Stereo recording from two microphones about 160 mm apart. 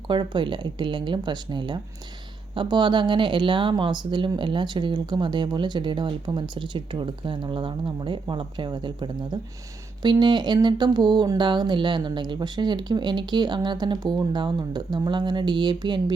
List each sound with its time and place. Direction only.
0.1 s speech: 30° right (ahead or behind)